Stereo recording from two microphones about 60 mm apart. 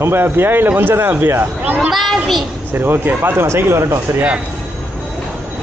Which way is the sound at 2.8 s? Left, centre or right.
Right.